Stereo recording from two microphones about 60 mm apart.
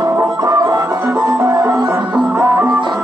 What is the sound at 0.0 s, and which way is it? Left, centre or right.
Music, right.